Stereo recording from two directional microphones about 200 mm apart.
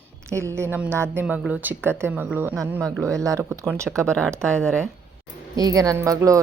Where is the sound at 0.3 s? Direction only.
15° right (ahead or behind).